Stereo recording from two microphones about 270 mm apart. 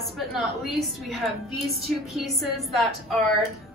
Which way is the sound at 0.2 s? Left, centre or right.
Centre.